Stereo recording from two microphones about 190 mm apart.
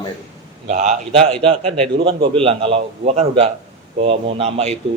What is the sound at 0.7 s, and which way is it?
Speech, 40° right (ahead or behind).